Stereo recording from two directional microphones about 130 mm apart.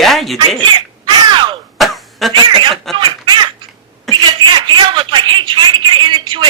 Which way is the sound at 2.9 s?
35° right (ahead or behind).